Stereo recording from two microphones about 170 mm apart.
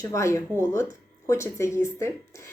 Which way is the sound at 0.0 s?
15° left (ahead or behind).